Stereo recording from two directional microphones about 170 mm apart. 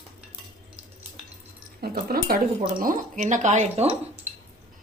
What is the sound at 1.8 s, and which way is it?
A woman's voice, 65° right (ahead or behind).